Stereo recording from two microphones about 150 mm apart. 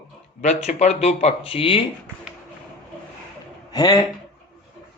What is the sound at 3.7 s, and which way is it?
Speech, 25° left (ahead or behind).